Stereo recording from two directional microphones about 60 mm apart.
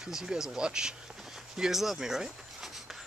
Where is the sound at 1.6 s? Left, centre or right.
Centre.